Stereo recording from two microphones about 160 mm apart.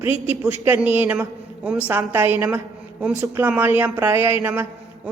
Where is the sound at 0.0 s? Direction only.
15° right (ahead or behind).